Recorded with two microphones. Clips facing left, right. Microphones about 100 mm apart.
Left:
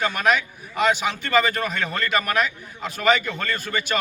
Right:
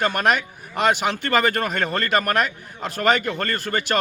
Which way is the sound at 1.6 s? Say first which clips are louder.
Right 2 dB; 50° right (ahead or behind).